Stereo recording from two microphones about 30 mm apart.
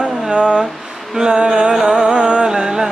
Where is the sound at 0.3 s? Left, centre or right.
Right.